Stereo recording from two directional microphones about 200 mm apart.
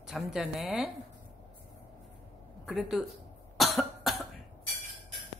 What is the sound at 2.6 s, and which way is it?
Cough, centre (ahead or behind).